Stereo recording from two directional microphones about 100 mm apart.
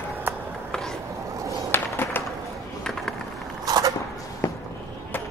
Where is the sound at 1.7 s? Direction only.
20° left (ahead or behind).